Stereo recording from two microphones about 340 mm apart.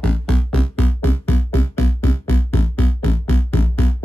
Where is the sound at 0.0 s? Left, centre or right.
Centre.